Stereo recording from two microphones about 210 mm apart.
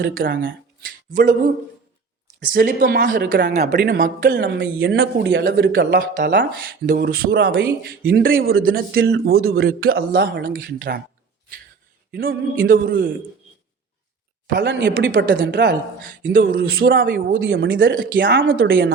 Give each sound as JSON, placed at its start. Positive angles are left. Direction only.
{"t": 0.2, "sound": "speech", "side_deg": -60}
{"t": 1.1, "sound": "speech", "side_deg": -40}
{"t": 2.4, "sound": "speech", "side_deg": -45}
{"t": 12.1, "sound": "speech", "side_deg": -45}
{"t": 14.4, "sound": "speech", "side_deg": -45}
{"t": 14.7, "sound": "speech", "side_deg": -60}
{"t": 15.1, "sound": "speech", "side_deg": -50}
{"t": 17.9, "sound": "speech", "side_deg": -45}
{"t": 18.2, "sound": "speech", "side_deg": -60}